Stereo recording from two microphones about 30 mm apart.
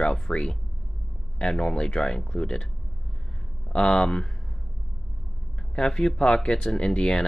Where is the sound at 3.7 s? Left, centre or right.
Left.